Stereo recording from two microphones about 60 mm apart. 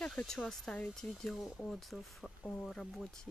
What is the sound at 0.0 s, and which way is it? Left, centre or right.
Speech, centre.